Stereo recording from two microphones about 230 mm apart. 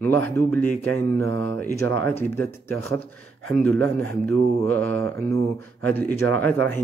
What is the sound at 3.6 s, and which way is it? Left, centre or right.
Speech, centre.